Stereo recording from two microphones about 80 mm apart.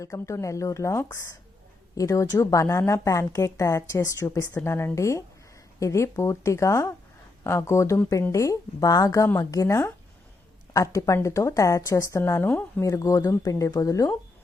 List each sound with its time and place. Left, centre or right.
0.0 s a woman's voice: left
12.8 s speech: left